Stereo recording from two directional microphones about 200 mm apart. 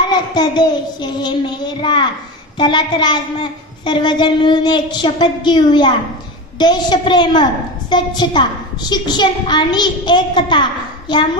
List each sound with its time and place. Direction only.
0.3 s a woman's voice: 20° left (ahead or behind)